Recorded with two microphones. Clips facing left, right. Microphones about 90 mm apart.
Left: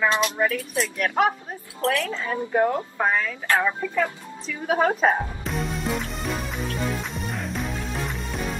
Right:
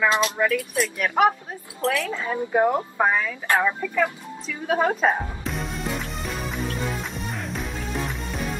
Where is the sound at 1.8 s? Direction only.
15° right (ahead or behind).